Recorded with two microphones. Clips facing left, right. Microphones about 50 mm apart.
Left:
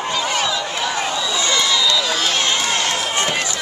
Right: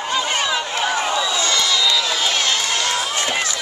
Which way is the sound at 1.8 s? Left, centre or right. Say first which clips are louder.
Left 1 dB; centre.